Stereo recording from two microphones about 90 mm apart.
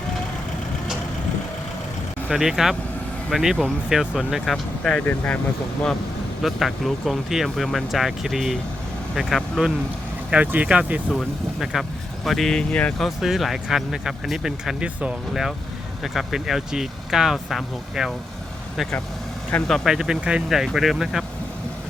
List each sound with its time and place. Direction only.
2.3 s speech: 5° right (ahead or behind); by 5.4 s 15° left (ahead or behind)
6.4 s speech: centre (ahead or behind)
10.3 s speech: 15° right (ahead or behind)
11.6 s speech: centre (ahead or behind)
13.0 s speech: centre (ahead or behind)
19.6 s speech: centre (ahead or behind)